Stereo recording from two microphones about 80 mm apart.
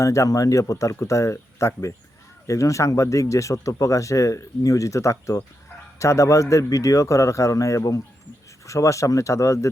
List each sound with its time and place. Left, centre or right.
0.0 s speech: left